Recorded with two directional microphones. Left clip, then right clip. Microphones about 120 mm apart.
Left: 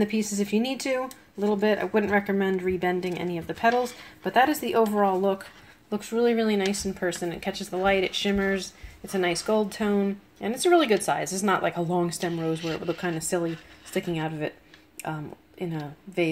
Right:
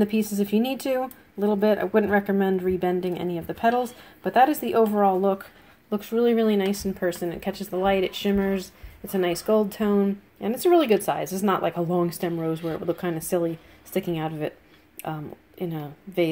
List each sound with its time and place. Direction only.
0.0 s speech: 55° right (ahead or behind)
3.7 s a woman's voice: 15° right (ahead or behind)
4.3 s speech: 50° right (ahead or behind)
4.8 s speech: 25° right (ahead or behind)
6.6 s speech: 25° right (ahead or behind)
12.4 s a woman's voice: 10° right (ahead or behind)
13.3 s a woman's voice: 30° right (ahead or behind)